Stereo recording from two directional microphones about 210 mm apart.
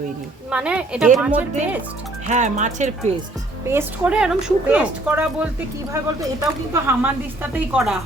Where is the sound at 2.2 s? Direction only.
35° right (ahead or behind).